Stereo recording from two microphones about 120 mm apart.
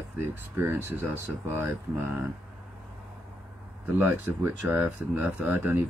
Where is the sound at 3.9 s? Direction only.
20° right (ahead or behind).